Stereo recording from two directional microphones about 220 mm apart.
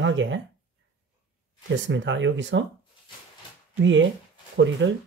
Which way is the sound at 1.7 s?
60° right (ahead or behind).